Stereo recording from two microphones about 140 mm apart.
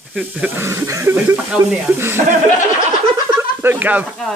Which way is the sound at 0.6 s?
20° right (ahead or behind).